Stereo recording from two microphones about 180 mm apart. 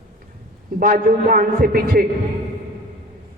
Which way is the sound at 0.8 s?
50° right (ahead or behind).